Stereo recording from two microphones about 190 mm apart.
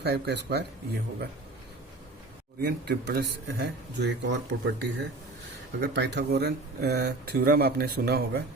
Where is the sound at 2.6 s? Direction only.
60° right (ahead or behind).